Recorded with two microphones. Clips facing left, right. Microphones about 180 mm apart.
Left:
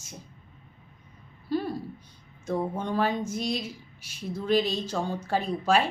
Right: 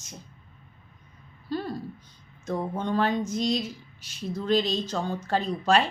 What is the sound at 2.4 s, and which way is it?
A woman's voice, 10° left (ahead or behind).